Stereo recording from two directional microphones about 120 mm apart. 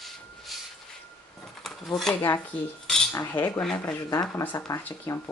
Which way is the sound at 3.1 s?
20° left (ahead or behind).